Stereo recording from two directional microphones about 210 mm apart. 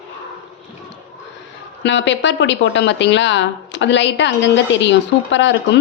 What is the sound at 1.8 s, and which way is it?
A woman's voice, 55° left (ahead or behind).